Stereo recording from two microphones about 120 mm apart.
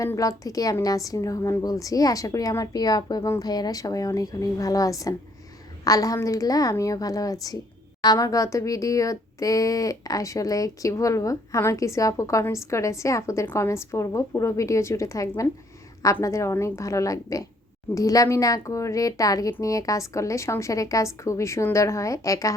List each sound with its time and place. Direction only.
0.0 s speech: 30° left (ahead or behind)